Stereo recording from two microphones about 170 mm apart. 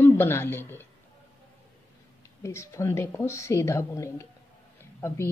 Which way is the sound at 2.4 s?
15° left (ahead or behind).